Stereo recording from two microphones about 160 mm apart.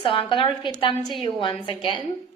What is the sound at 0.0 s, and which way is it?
A woman's voice, 30° left (ahead or behind).